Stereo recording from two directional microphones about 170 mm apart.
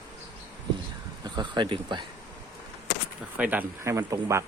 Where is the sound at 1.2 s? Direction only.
25° right (ahead or behind).